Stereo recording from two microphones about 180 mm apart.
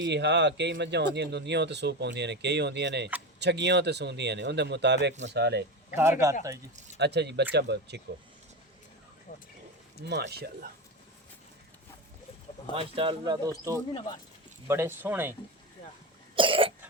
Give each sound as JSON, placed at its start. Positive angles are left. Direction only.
{"t": 0.0, "sound": "speech", "side_deg": -70}
{"t": 5.9, "sound": "speech", "side_deg": -15}
{"t": 7.0, "sound": "speech", "side_deg": -70}
{"t": 10.0, "sound": "speech", "side_deg": -65}
{"t": 12.7, "sound": "speech", "side_deg": -30}
{"t": 13.9, "sound": "speech", "side_deg": 25}
{"t": 14.7, "sound": "speech", "side_deg": -15}
{"t": 16.3, "sound": "cough", "side_deg": -30}